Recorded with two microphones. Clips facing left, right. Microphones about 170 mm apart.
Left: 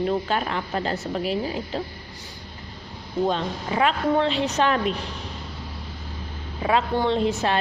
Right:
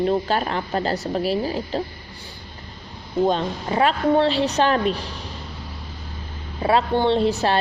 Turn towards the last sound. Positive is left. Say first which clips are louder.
# right 3 dB
turn(degrees=-35)  # may be behind; listen again after turning